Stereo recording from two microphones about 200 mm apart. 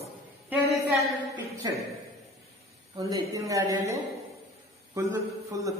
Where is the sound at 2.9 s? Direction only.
15° right (ahead or behind).